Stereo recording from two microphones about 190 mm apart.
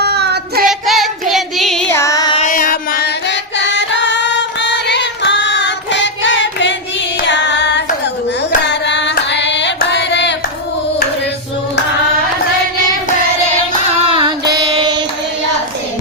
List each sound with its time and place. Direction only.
0.0 s child singing: 60° right (ahead or behind)
0.7 s child singing: centre (ahead or behind)
1.9 s music: 15° left (ahead or behind)
2.4 s singing: 45° left (ahead or behind); by 7.9 s 65° left (ahead or behind)
8.6 s carnatic music: 65° left (ahead or behind)
14.0 s child singing: 25° right (ahead or behind)